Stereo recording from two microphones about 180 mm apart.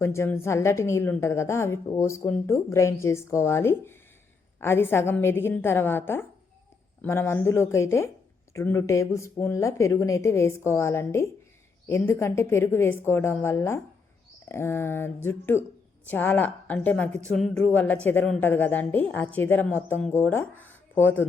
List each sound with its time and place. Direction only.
0.0 s a woman's voice: 15° left (ahead or behind)